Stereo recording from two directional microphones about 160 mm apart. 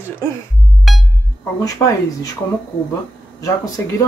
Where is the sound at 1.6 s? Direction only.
20° left (ahead or behind).